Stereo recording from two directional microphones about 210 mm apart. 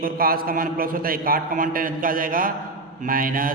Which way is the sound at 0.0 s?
45° right (ahead or behind).